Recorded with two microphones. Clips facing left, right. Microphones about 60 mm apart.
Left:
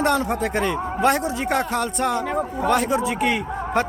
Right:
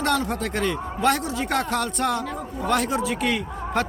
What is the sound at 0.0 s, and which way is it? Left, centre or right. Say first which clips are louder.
A man's voice: left 3 dB; centre.